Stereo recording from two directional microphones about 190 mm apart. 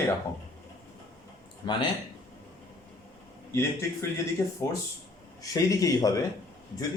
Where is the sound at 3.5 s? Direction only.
15° left (ahead or behind).